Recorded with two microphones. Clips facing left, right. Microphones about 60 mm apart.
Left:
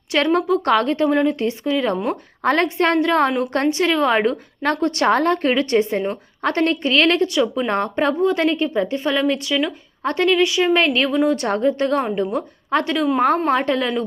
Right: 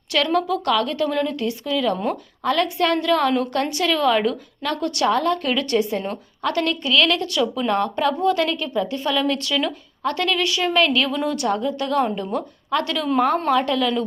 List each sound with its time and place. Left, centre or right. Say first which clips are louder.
0.1 s a woman's voice: left 3 dB; left
2.4 s a woman's voice: left 3 dB; left
7.3 s a woman's voice: left 3 dB; left
7.7 s a woman's voice: left 1 dB; left
11.3 s a woman's voice: left 4 dB; left